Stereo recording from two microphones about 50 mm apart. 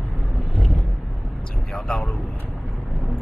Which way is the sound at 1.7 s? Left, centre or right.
Centre.